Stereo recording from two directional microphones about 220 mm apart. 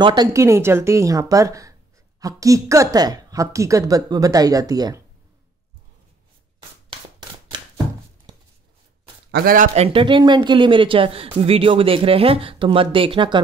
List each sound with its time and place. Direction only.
0.0 s speech: 20° right (ahead or behind)
6.9 s a sound: 20° right (ahead or behind)
9.3 s speech: 40° right (ahead or behind)
9.8 s speech: 25° right (ahead or behind)